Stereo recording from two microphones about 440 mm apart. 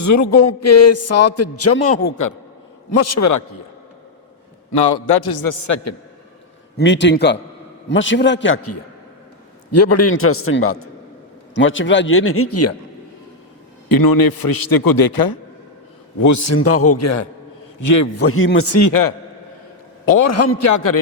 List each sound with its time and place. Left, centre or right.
0.0 s a man's voice: left
4.7 s a man's voice: left
5.6 s a man's voice: left
6.7 s a man's voice: left
13.8 s a man's voice: left
16.2 s a man's voice: left